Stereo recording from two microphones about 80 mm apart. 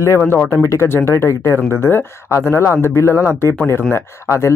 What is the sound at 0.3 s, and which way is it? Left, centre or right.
Speech, left.